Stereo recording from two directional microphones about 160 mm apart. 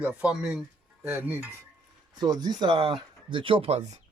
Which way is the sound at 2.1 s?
25° right (ahead or behind).